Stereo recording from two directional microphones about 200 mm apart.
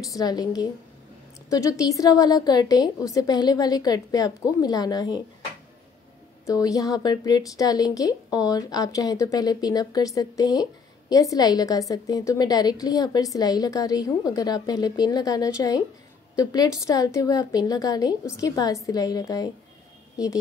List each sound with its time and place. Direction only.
0.0 s a woman's voice: 20° left (ahead or behind)
6.4 s a woman's voice: 15° left (ahead or behind)